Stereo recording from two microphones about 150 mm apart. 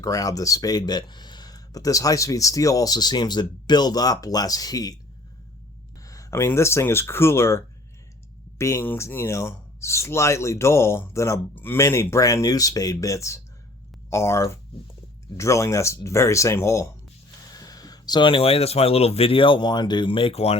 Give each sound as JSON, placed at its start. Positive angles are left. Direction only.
{"t": 0.0, "sound": "speech", "side_deg": 25}
{"t": 6.0, "sound": "speech", "side_deg": 20}